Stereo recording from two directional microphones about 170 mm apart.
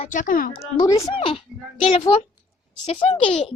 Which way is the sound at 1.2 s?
30° left (ahead or behind).